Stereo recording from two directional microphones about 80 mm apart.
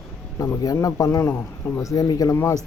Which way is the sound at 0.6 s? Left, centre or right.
Left.